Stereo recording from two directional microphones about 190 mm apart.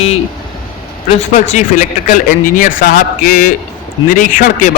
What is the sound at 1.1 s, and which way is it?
A man's voice, 40° left (ahead or behind).